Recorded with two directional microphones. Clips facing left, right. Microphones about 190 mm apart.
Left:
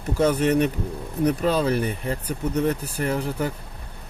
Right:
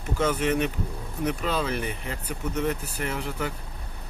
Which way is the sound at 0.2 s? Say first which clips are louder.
Left 5 dB; 40° left (ahead or behind).